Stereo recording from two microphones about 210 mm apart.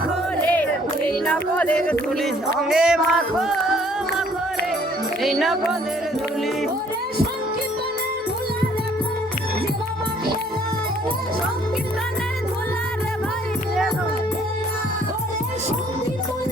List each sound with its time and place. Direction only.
0.4 s music: 5° left (ahead or behind)
5.2 s music: centre (ahead or behind)